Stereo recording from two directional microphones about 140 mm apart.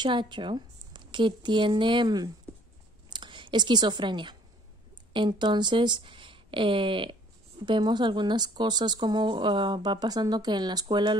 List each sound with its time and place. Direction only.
0.0 s a woman's voice: 35° right (ahead or behind)